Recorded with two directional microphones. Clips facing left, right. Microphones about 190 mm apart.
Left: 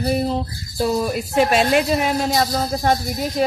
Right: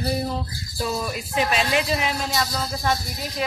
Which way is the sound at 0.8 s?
40° left (ahead or behind).